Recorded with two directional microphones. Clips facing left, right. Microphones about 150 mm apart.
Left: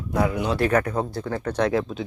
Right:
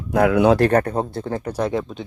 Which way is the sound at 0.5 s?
35° right (ahead or behind).